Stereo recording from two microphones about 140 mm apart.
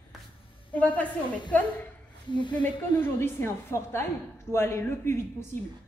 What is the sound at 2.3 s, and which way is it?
Speech, 35° left (ahead or behind).